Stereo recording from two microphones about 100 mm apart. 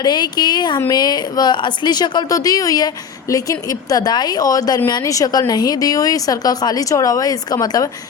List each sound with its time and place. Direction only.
0.0 s speech: 45° left (ahead or behind)